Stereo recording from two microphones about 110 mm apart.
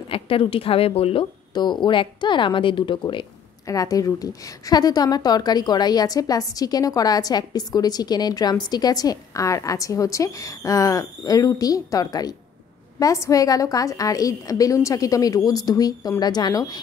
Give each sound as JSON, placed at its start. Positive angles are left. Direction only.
{"t": 0.1, "sound": "a woman's voice", "side_deg": 55}
{"t": 1.5, "sound": "a woman's voice", "side_deg": 40}
{"t": 3.6, "sound": "a woman's voice", "side_deg": 30}